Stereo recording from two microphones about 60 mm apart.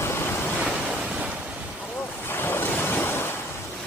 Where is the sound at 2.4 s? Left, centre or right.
Left.